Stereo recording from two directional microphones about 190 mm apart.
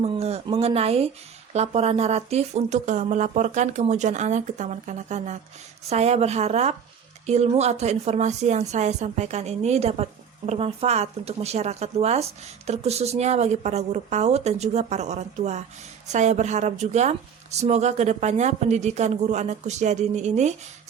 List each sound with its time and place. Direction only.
0.0 s a woman's voice: 30° right (ahead or behind)